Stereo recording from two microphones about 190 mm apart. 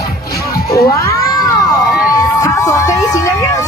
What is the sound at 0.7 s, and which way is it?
Crowd, 15° left (ahead or behind).